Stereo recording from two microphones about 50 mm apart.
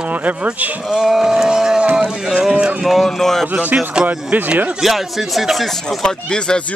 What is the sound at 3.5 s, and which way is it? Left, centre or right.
Speech, right.